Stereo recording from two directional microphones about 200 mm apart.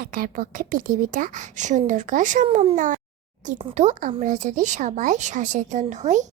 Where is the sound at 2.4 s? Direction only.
30° right (ahead or behind).